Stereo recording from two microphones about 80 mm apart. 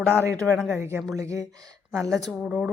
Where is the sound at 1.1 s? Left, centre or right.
Right.